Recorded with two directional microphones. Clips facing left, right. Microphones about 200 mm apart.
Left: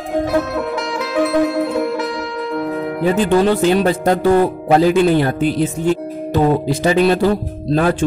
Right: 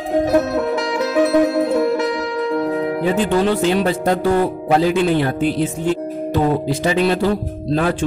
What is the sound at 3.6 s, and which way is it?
Speech, 45° left (ahead or behind).